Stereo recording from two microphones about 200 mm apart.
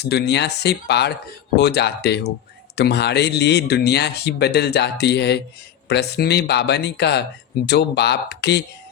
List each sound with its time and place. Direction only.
0.0 s speech: 55° left (ahead or behind)